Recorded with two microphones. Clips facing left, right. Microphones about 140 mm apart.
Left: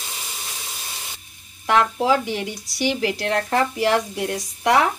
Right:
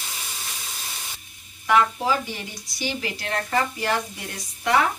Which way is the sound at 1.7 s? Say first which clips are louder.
Left 2 dB; 70° left (ahead or behind).